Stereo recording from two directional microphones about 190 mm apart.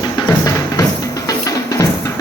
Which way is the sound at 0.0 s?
20° left (ahead or behind).